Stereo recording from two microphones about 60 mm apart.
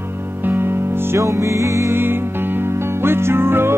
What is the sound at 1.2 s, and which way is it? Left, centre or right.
Music, right.